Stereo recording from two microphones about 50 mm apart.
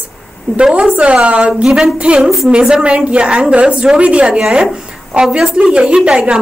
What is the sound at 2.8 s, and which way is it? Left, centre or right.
A woman's voice, right.